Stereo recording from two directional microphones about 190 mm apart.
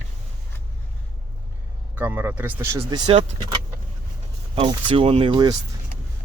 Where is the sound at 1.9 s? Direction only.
10° right (ahead or behind).